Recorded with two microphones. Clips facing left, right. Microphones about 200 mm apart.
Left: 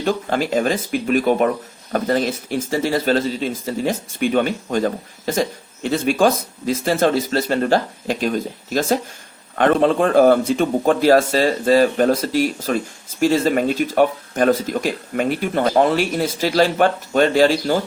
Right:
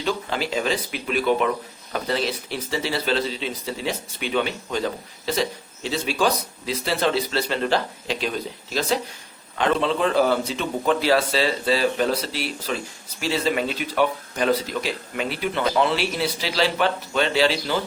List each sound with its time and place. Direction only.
0.0 s speech: 50° left (ahead or behind)